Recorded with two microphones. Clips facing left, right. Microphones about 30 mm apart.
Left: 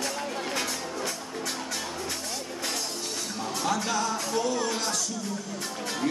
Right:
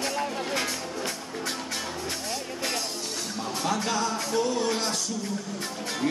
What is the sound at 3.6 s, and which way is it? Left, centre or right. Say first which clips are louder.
Music: even; right.